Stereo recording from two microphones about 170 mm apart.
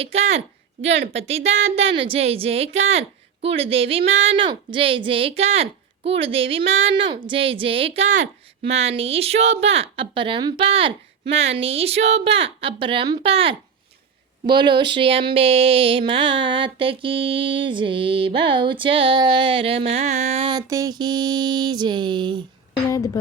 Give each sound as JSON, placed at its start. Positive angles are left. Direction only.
{"t": 0.0, "sound": "a woman's voice", "side_deg": -40}